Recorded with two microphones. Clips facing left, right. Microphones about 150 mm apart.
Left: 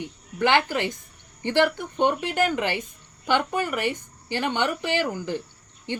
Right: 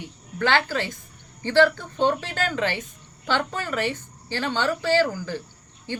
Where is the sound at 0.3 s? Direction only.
15° left (ahead or behind).